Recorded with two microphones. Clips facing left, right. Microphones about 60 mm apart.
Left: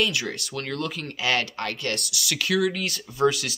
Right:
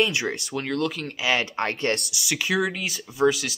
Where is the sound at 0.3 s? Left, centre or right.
Centre.